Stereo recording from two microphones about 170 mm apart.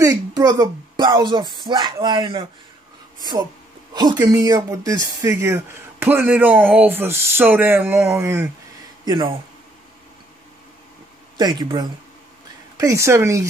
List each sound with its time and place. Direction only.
0.0 s a man's voice: 20° right (ahead or behind)
11.3 s speech: 25° right (ahead or behind)